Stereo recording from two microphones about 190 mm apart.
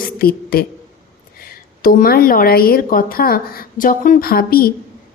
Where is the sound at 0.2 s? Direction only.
50° left (ahead or behind).